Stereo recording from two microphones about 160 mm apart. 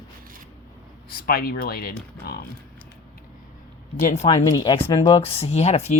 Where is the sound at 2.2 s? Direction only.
70° left (ahead or behind).